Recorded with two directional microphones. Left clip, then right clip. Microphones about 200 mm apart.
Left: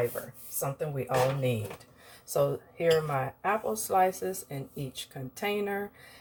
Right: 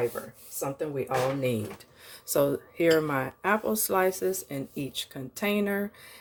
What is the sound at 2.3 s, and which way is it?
Speech, 50° right (ahead or behind).